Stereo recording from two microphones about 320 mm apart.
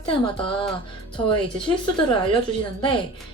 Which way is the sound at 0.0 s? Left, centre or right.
Centre.